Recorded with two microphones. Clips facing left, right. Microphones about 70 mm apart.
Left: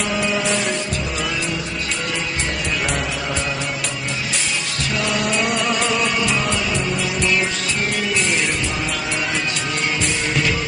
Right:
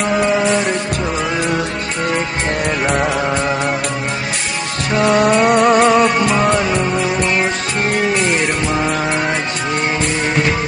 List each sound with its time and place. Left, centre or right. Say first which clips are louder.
0.1 s mantra: right 8 dB; right
4.9 s music: right 10 dB; right